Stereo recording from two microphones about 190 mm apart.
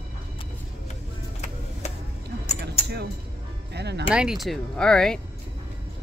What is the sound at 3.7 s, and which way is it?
Music, 60° right (ahead or behind).